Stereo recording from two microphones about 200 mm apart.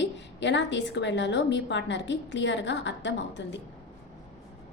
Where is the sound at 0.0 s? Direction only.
65° left (ahead or behind).